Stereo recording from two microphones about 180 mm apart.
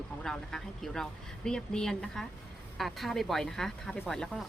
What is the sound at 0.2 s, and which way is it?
Speech, centre (ahead or behind).